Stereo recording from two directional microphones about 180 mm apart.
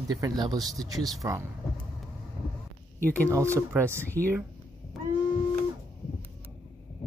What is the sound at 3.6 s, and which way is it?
Speech, 15° right (ahead or behind).